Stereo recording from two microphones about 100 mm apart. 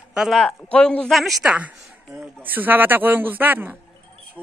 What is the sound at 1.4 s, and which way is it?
A woman's voice, 15° right (ahead or behind).